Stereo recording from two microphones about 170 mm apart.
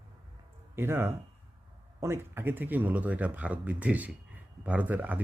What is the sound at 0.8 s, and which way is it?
Speech, 15° right (ahead or behind).